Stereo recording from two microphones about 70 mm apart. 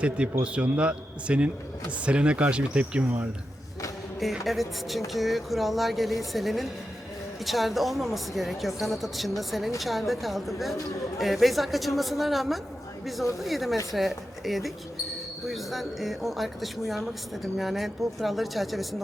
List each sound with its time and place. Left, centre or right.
0.4 s speech: centre
4.2 s speech: centre